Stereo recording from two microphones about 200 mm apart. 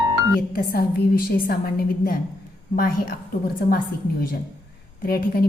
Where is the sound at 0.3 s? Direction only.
50° left (ahead or behind).